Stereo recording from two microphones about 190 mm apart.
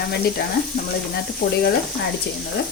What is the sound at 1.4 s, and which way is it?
Speech, 55° left (ahead or behind).